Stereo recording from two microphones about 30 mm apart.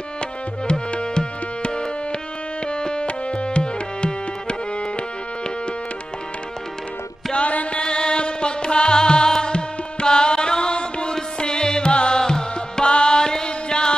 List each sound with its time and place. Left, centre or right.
0.7 s music: left
3.1 s tabla: left
7.3 s music: left
7.8 s music: left
12.9 s chant: left